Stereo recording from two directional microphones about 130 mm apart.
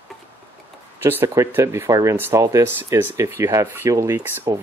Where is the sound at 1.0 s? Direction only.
15° right (ahead or behind).